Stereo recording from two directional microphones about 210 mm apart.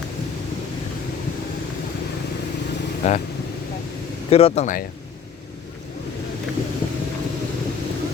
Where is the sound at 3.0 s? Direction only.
35° left (ahead or behind).